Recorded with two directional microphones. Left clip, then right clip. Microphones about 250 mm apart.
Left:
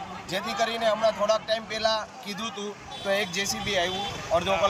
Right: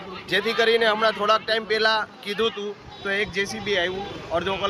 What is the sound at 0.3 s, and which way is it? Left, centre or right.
A man's voice, centre.